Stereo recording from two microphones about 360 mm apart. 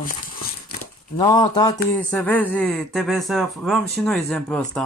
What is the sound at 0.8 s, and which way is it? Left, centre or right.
Speech, centre.